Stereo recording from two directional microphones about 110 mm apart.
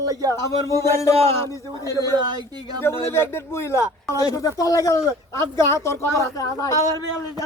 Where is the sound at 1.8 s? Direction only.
30° left (ahead or behind).